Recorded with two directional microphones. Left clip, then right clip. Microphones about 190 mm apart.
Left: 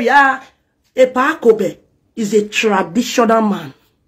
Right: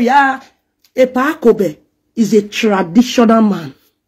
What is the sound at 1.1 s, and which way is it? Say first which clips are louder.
Speech: right 1 dB; 55° right (ahead or behind).